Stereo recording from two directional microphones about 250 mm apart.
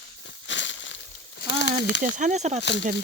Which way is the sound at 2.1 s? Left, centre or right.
Right.